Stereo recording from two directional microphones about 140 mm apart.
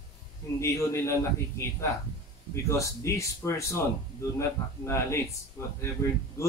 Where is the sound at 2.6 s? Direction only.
20° left (ahead or behind).